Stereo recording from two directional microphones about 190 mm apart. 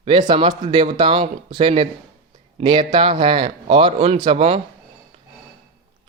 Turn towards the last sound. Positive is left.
turn(degrees=-30)  # may be behind; listen again after turning